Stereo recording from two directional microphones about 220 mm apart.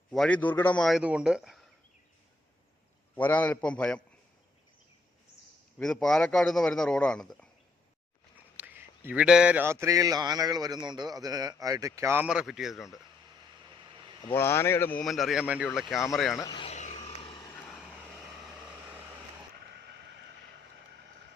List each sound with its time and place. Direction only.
0.1 s speech: 5° left (ahead or behind)
3.2 s a man's voice: 5° left (ahead or behind)
5.8 s speech: centre (ahead or behind)
8.5 s speech: 10° right (ahead or behind)
14.3 s speech: 10° left (ahead or behind)
16.4 s vehicle: 20° left (ahead or behind)
17.5 s vehicle: centre (ahead or behind)
19.5 s vehicle: 50° right (ahead or behind)